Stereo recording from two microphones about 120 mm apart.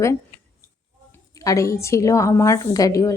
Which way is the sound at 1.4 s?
25° left (ahead or behind).